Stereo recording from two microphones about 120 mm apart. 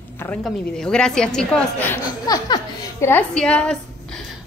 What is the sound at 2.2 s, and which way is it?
Speech, 35° left (ahead or behind).